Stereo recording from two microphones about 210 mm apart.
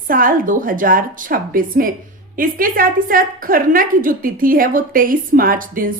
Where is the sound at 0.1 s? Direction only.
40° right (ahead or behind).